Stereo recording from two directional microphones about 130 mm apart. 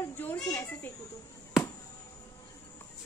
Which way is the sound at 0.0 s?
15° left (ahead or behind).